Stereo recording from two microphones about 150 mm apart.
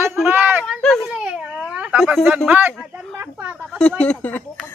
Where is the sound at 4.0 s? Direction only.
10° left (ahead or behind).